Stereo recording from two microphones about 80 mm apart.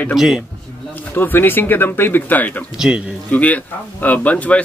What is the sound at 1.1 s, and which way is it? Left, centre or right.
Speech, left.